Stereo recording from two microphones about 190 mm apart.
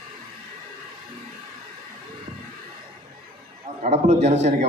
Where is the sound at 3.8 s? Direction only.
35° right (ahead or behind).